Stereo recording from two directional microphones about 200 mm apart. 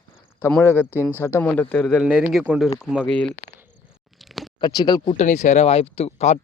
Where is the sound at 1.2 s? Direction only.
10° left (ahead or behind); by 3.1 s 5° right (ahead or behind).